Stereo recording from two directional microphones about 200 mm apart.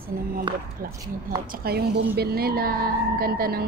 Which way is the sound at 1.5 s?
50° right (ahead or behind).